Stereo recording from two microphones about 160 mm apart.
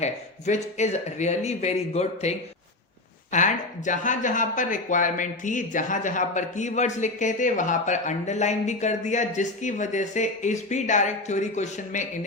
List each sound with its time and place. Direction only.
0.0 s speech: 45° left (ahead or behind)
3.3 s speech: 50° left (ahead or behind)